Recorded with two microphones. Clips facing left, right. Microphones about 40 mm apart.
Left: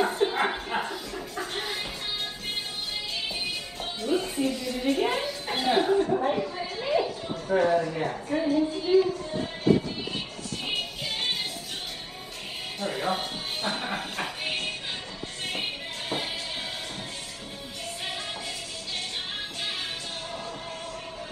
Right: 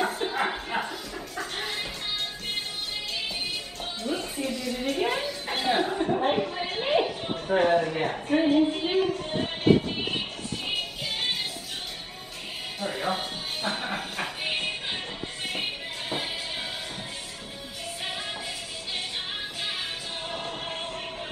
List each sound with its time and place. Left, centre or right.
0.0 s a sound: centre
4.1 s music: right
4.9 s a sound: centre
6.2 s chatter: right
10.7 s music: centre
12.8 s music: centre
14.5 s music: centre
15.4 s music: centre